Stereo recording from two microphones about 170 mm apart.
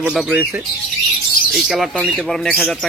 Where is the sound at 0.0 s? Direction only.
Centre (ahead or behind).